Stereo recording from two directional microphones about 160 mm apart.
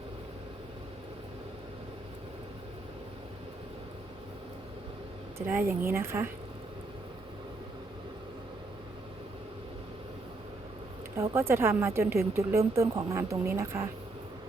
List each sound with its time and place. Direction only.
5.5 s speech: 15° right (ahead or behind)
11.2 s speech: 15° right (ahead or behind)